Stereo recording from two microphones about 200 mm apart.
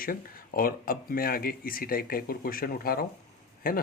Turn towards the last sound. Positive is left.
turn(degrees=45)  # may be behind; listen again after turning